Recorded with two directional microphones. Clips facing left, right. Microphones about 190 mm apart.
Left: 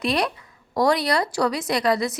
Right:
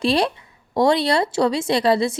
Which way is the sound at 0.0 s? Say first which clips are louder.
Right 4 dB; 30° right (ahead or behind).